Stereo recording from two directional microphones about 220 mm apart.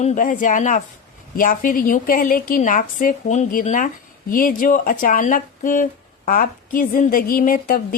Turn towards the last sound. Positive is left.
turn(degrees=40)  # may be behind; listen again after turning